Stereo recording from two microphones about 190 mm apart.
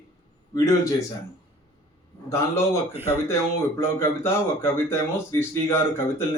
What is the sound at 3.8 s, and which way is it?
Speech, 10° left (ahead or behind).